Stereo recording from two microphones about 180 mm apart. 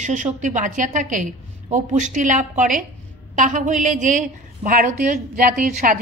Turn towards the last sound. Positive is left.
turn(degrees=-50)  # may be behind; listen again after turning